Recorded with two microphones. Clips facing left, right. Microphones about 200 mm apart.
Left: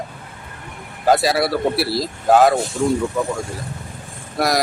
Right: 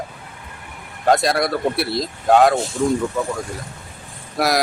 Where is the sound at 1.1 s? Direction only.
5° left (ahead or behind).